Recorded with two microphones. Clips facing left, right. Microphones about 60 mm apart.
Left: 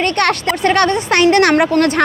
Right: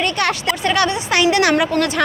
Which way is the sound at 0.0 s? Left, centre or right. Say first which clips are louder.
Left 4 dB; left.